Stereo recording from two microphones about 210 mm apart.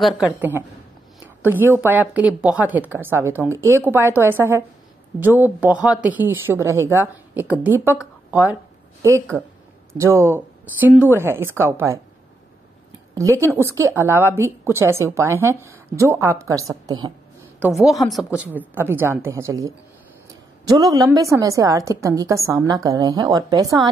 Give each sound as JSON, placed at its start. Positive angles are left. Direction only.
{"t": 0.4, "sound": "a woman's voice", "side_deg": -10}
{"t": 13.1, "sound": "a woman's voice", "side_deg": -15}
{"t": 17.7, "sound": "a woman's voice", "side_deg": 0}